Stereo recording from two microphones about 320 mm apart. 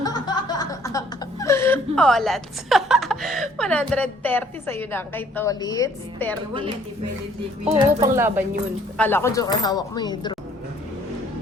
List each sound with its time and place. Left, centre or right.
0.0 s chuckle: centre
7.6 s speech: centre
8.0 s speech: centre
9.0 s speech: centre